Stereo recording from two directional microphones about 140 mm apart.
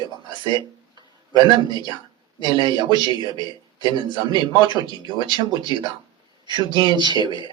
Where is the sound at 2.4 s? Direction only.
30° right (ahead or behind).